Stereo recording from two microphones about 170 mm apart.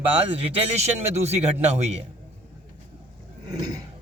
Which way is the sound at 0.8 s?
40° right (ahead or behind).